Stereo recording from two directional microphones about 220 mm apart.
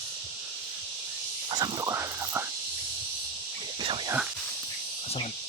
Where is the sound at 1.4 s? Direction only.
20° right (ahead or behind).